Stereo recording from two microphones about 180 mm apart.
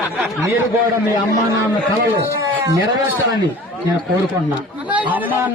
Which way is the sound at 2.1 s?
20° right (ahead or behind).